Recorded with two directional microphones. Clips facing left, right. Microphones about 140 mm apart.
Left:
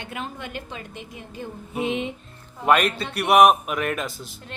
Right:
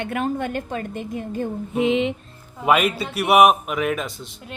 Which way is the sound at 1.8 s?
90° right.